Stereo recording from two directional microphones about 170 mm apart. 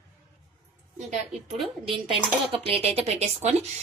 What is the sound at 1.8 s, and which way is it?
Speech, 30° right (ahead or behind).